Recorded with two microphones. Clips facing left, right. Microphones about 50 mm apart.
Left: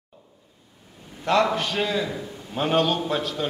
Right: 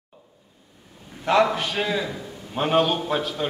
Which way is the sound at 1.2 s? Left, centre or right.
Centre.